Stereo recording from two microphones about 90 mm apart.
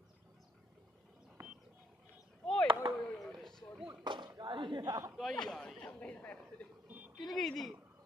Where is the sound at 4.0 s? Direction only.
55° right (ahead or behind).